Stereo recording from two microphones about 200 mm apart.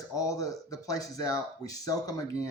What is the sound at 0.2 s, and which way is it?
Speech, 15° left (ahead or behind).